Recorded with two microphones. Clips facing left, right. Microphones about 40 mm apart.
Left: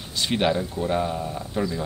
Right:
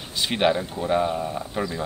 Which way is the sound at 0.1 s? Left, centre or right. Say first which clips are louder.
Right 1 dB; centre.